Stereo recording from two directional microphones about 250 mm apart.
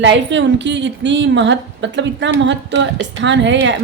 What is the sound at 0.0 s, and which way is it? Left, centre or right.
A woman's voice, right.